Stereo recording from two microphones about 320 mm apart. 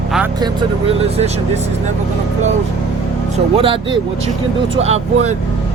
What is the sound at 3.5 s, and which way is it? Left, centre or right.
Speech, centre.